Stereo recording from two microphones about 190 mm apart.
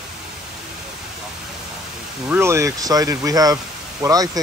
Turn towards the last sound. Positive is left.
turn(degrees=-20)  # may be behind; listen again after turning